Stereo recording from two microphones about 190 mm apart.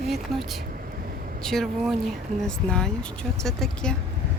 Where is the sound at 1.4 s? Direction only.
Centre (ahead or behind).